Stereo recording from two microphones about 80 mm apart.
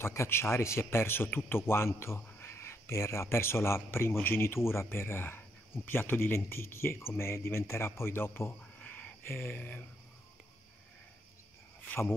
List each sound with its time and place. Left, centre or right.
0.0 s speech: left
11.8 s cricket: left